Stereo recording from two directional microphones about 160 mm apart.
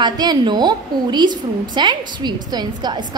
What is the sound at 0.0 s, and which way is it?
A woman's voice, 25° right (ahead or behind).